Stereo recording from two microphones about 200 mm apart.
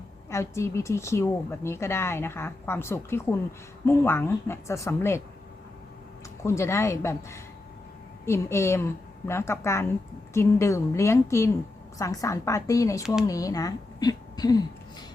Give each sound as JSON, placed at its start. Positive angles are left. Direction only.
{"t": 0.3, "sound": "a woman's voice", "side_deg": 15}
{"t": 6.4, "sound": "a woman's voice", "side_deg": 15}